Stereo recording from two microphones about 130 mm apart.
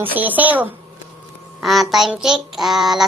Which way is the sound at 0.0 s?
15° right (ahead or behind).